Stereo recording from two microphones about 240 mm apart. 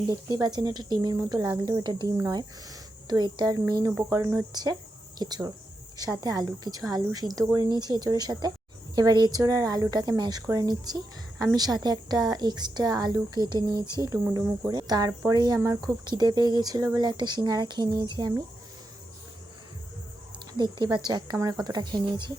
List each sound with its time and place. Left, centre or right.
0.1 s a woman's voice: centre
20.5 s a woman's voice: centre